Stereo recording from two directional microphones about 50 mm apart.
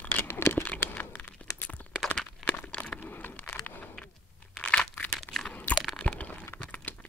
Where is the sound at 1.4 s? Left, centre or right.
Left.